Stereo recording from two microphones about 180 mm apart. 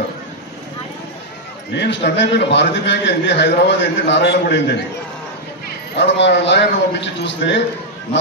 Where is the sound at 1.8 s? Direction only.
75° left (ahead or behind).